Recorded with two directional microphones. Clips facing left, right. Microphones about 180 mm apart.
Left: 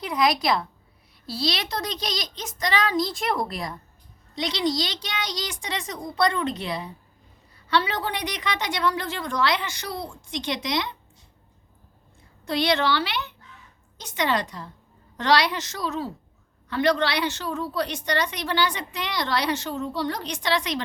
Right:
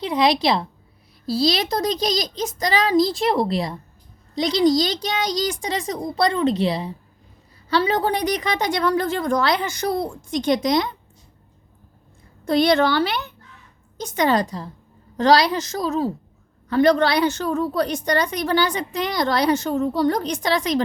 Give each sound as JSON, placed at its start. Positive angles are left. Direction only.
{"t": 0.0, "sound": "a woman's voice", "side_deg": -30}
{"t": 4.4, "sound": "a child's voice", "side_deg": -40}
{"t": 12.5, "sound": "a woman's voice", "side_deg": -45}